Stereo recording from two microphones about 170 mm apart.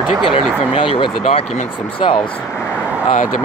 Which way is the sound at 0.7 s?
30° left (ahead or behind).